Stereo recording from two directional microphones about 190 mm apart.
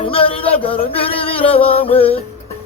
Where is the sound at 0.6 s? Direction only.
30° left (ahead or behind).